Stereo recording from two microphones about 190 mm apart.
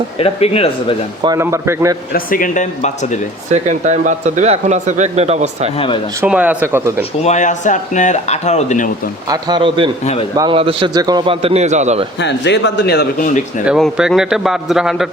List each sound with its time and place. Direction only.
0.2 s speech: 30° left (ahead or behind)
1.2 s a man's voice: 15° right (ahead or behind)
2.1 s speech: 45° left (ahead or behind)
3.5 s speech: 40° right (ahead or behind)
5.7 s speech: 30° left (ahead or behind)
6.2 s a man's voice: 5° right (ahead or behind)
7.2 s speech: 35° left (ahead or behind)
9.3 s a man's voice: 25° right (ahead or behind)
12.2 s speech: 65° left (ahead or behind); by 13.4 s 45° left (ahead or behind)
13.7 s a man's voice: centre (ahead or behind)